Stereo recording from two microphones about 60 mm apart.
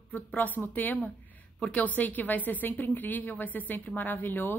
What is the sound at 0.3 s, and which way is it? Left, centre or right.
A woman's voice, left.